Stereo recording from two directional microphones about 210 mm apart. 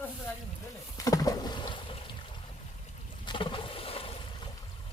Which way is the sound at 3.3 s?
25° left (ahead or behind).